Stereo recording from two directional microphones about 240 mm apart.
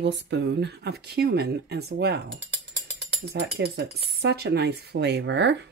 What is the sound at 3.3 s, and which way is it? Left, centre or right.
Speech, right.